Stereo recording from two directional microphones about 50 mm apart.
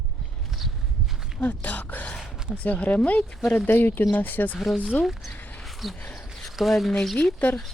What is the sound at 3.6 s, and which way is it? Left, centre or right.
Speech, left.